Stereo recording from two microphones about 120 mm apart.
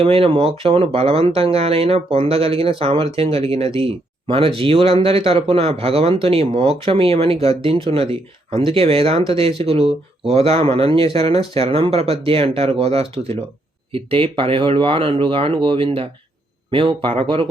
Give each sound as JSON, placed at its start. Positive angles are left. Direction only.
{"t": 0.0, "sound": "speech", "side_deg": -50}